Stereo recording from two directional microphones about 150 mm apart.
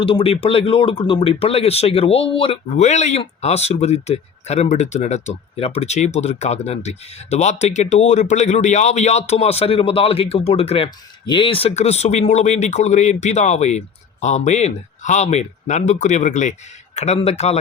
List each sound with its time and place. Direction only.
0.0 s speech: 40° left (ahead or behind)
2.8 s speech: 50° left (ahead or behind)